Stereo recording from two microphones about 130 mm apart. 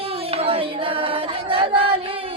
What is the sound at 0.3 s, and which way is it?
Singing, 50° right (ahead or behind).